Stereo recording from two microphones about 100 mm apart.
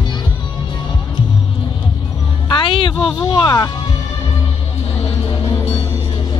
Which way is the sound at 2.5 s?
60° left (ahead or behind).